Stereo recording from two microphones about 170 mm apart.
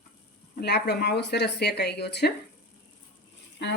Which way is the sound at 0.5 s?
75° left (ahead or behind).